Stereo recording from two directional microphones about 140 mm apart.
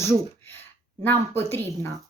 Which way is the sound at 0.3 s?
15° left (ahead or behind).